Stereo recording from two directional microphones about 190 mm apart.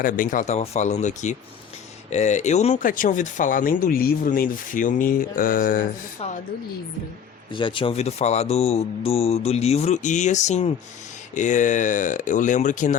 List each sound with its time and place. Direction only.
0.0 s speech: 45° left (ahead or behind)
7.5 s speech: 25° left (ahead or behind); by 13.0 s 40° left (ahead or behind)